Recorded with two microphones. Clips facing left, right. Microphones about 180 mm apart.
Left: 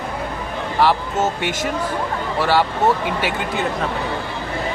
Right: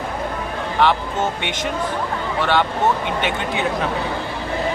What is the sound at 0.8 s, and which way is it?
Speech, 5° left (ahead or behind).